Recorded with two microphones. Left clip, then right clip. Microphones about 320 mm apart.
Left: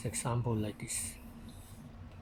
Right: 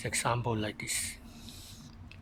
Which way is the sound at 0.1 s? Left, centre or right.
Right.